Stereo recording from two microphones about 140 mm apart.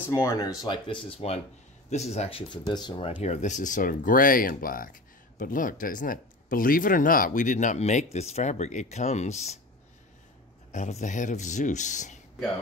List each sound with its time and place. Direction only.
0.1 s speech: 20° left (ahead or behind); by 2.6 s 40° left (ahead or behind)
2.6 s speech: 30° left (ahead or behind)
3.2 s speech: 55° left (ahead or behind); by 4.9 s 90° left
5.4 s speech: 75° left (ahead or behind); by 9.6 s 55° left (ahead or behind)
10.7 s speech: 60° left (ahead or behind)